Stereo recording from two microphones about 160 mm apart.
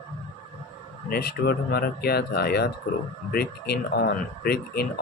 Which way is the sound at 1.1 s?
75° left (ahead or behind).